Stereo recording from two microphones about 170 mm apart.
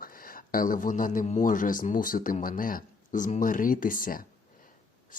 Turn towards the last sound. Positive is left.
turn(degrees=55)  # may be behind; listen again after turning